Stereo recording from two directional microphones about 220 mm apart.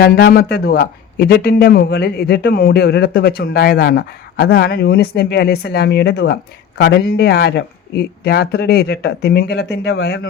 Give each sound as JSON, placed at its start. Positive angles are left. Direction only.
{"t": 0.0, "sound": "a man's voice", "side_deg": 45}